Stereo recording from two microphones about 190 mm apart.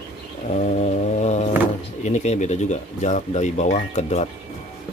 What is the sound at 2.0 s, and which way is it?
Speech, 40° left (ahead or behind).